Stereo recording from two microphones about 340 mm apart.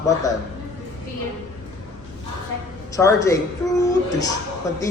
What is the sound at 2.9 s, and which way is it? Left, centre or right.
Speech, centre.